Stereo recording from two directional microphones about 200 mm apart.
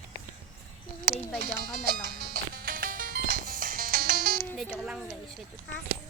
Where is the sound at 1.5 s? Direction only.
50° right (ahead or behind).